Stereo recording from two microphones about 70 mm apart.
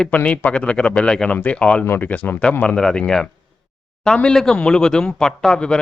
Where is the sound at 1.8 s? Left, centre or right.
Left.